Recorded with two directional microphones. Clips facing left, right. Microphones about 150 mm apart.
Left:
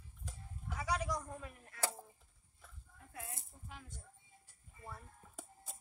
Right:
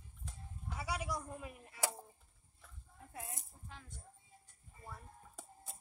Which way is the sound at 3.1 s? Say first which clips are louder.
Right 1 dB; 20° right (ahead or behind).